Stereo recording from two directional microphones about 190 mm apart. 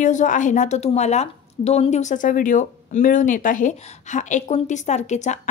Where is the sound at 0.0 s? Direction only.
40° left (ahead or behind).